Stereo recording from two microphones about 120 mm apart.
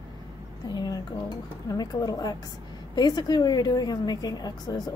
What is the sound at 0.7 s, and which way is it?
A woman's voice, 35° left (ahead or behind).